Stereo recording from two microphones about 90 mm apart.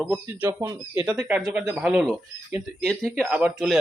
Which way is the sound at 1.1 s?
15° right (ahead or behind).